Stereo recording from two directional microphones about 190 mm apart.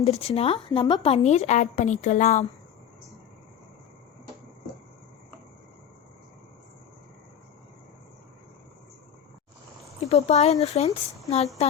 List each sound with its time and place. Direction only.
0.0 s a woman's voice: 30° left (ahead or behind)
10.0 s a woman's voice: 35° left (ahead or behind)